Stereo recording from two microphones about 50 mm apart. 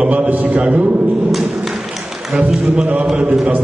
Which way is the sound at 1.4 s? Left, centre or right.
Centre.